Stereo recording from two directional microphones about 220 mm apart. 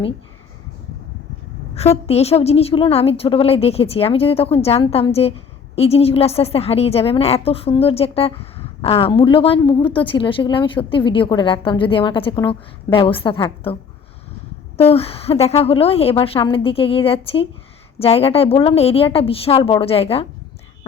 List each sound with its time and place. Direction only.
1.7 s a woman's voice: 30° left (ahead or behind)
14.8 s a woman's voice: 25° left (ahead or behind)